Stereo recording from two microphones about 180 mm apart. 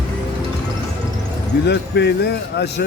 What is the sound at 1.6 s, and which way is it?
Speech, 70° left (ahead or behind).